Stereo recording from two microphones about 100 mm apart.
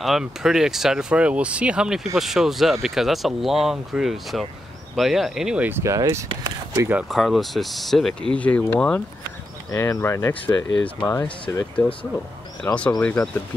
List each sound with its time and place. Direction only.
0.0 s speech: 5° right (ahead or behind)
5.6 s speech: 25° right (ahead or behind)
5.9 s speech: 35° right (ahead or behind)
7.1 s speech: centre (ahead or behind)
9.7 s speech: 30° left (ahead or behind); by 12.1 s 10° left (ahead or behind)
12.7 s speech: 25° left (ahead or behind)
13.0 s speech: 15° left (ahead or behind)